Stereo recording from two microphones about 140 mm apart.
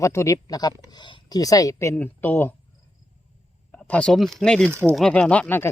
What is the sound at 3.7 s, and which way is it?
Speech, 10° left (ahead or behind).